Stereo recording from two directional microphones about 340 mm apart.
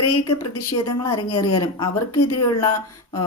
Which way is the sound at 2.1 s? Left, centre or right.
Left.